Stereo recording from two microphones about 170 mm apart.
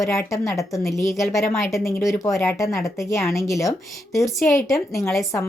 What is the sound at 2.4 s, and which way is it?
Speech, 15° left (ahead or behind).